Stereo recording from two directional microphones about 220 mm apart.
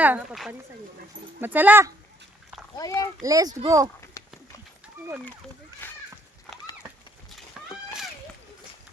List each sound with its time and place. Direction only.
0.0 s a child's voice: 5° right (ahead or behind)
2.7 s a child's voice: 15° left (ahead or behind)
3.2 s a child's voice: 15° right (ahead or behind)
4.2 s clip-clop: 15° left (ahead or behind)
5.8 s a sound: 10° left (ahead or behind)